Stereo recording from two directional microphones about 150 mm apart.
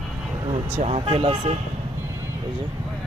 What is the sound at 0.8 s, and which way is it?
Speech, 40° right (ahead or behind).